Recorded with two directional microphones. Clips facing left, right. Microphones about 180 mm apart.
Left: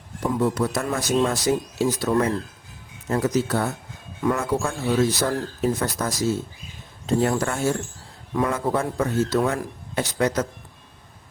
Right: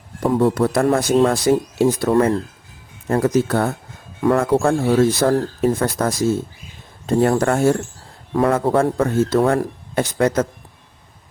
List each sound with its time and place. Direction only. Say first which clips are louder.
0.2 s speech: right 6 dB; 60° right (ahead or behind)